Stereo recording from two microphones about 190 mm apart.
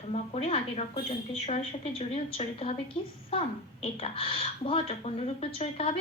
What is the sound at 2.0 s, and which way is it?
Speech, 35° left (ahead or behind).